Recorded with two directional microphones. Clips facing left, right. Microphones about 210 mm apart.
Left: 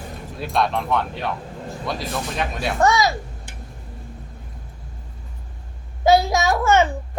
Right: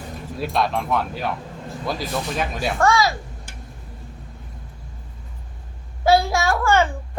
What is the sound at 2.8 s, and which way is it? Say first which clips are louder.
Speech: left 1 dB; 20° left (ahead or behind).